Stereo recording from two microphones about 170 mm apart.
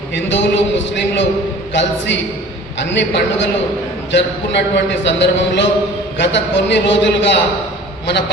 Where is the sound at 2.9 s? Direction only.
90° left.